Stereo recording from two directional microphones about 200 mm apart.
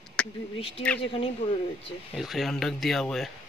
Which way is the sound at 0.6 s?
30° left (ahead or behind).